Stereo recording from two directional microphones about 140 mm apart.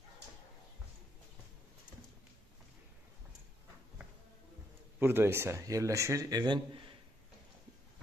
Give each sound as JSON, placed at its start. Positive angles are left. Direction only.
{"t": 4.9, "sound": "a man's voice", "side_deg": -15}